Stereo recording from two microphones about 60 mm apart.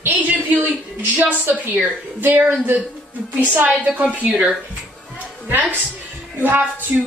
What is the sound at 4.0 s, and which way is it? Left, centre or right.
A woman's voice, right.